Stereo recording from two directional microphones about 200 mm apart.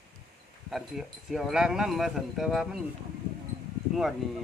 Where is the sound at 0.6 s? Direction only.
Centre (ahead or behind).